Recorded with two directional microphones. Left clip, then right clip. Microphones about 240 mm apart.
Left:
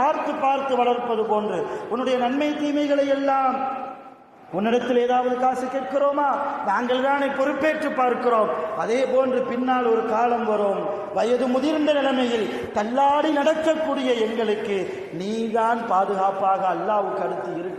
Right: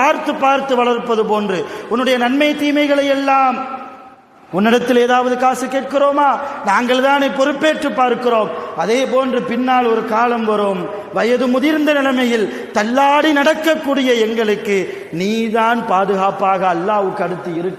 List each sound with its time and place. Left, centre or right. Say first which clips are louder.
0.0 s a man's voice: right 7 dB; right
4.5 s a man's voice: right 8 dB; right
11.6 s a man's voice: right 6 dB; right